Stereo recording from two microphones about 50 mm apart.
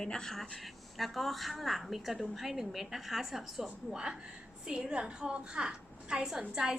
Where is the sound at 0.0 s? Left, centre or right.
Centre.